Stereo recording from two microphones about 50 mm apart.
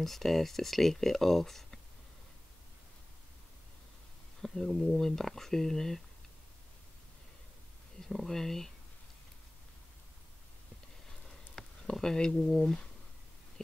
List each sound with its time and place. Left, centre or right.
0.0 s speech: centre
4.4 s speech: centre
8.0 s speech: centre
11.1 s a sound: centre